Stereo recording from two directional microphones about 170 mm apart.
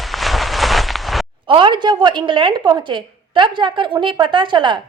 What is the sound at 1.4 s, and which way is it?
A woman's voice, 30° right (ahead or behind).